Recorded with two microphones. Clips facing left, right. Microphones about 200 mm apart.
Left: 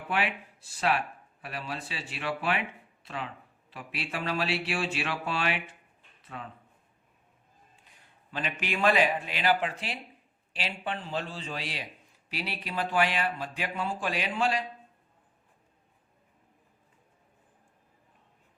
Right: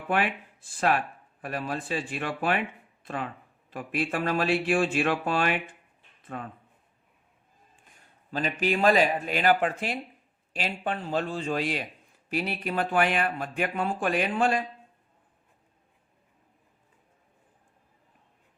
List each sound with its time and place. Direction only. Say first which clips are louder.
0.1 s speech: right 4 dB; 50° right (ahead or behind)
7.8 s a man's voice: right 1 dB; 50° right (ahead or behind)